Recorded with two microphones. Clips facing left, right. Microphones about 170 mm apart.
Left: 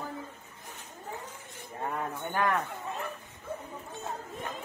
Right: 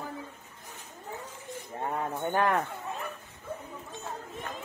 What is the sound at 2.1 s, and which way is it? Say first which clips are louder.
Speech: right 3 dB; 35° right (ahead or behind).